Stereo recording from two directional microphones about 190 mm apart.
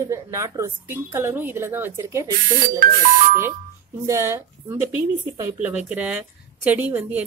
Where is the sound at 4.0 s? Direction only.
15° right (ahead or behind).